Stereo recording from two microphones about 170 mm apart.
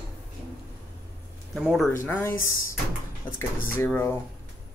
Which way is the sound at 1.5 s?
Centre (ahead or behind).